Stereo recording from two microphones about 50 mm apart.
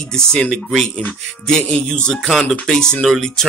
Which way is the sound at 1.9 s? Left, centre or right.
Centre.